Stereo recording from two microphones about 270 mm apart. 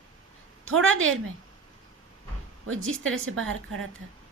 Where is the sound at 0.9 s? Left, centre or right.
Right.